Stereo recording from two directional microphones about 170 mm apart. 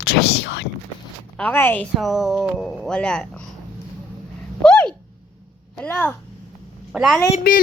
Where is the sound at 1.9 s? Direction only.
Centre (ahead or behind).